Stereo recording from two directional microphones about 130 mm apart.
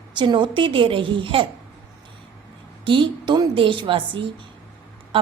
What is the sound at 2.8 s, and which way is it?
A woman's voice, 40° right (ahead or behind).